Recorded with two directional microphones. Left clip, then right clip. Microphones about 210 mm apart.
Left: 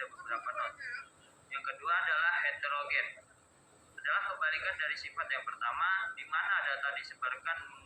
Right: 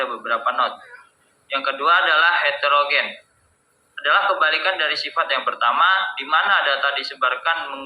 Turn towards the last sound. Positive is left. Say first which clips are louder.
# right 17 dB
turn(degrees=-50)  # may be behind; listen again after turning